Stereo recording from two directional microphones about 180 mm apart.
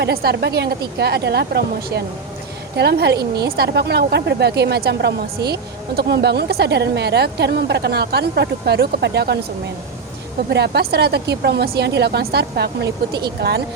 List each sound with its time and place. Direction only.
0.0 s a woman's voice: 60° right (ahead or behind)
10.5 s a woman's voice: 65° right (ahead or behind)